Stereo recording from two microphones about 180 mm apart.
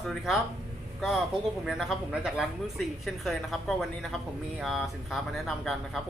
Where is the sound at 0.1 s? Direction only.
Centre (ahead or behind).